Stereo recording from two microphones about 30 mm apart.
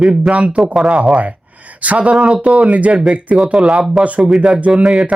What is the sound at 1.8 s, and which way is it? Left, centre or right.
Speech, right.